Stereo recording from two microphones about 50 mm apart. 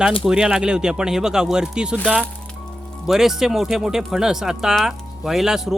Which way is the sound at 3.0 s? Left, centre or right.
Centre.